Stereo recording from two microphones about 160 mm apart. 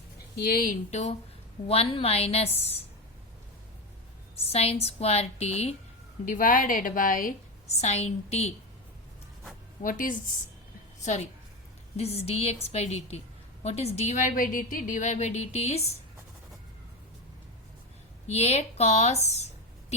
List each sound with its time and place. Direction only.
0.3 s a woman's voice: 70° left (ahead or behind); by 2.7 s 40° left (ahead or behind)
4.4 s a woman's voice: 40° left (ahead or behind)
6.2 s speech: 55° left (ahead or behind)
7.7 s a woman's voice: 45° left (ahead or behind)
9.8 s speech: 55° left (ahead or behind)
11.0 s a woman's voice: 45° left (ahead or behind)
18.3 s a woman's voice: 40° left (ahead or behind)